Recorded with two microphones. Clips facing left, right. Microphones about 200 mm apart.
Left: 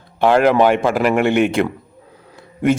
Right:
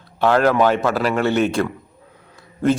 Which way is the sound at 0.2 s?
15° left (ahead or behind).